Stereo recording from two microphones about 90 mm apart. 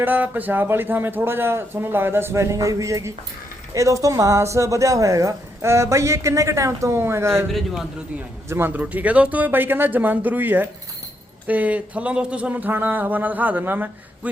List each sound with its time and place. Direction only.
0.0 s a man's voice: 20° right (ahead or behind)
7.4 s a man's voice: centre (ahead or behind)
8.4 s a man's voice: 25° right (ahead or behind)